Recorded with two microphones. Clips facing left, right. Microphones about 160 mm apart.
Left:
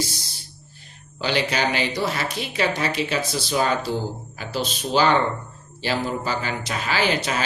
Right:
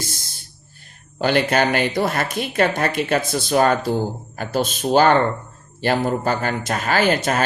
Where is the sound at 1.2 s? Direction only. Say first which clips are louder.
Right 5 dB; 50° right (ahead or behind).